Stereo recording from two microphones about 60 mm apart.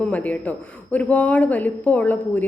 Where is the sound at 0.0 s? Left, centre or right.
Left.